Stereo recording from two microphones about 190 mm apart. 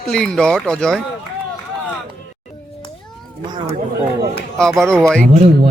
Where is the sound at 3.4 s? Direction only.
20° right (ahead or behind).